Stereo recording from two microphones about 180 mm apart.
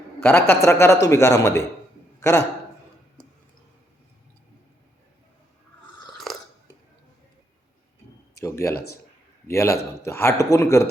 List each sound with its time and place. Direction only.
0.2 s speech: 10° left (ahead or behind)
6.3 s burping: centre (ahead or behind)
8.4 s speech: 15° left (ahead or behind)
8.7 s speech: 60° left (ahead or behind)
9.5 s speech: 15° left (ahead or behind)